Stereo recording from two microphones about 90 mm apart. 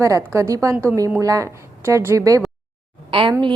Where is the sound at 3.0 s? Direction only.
70° right (ahead or behind).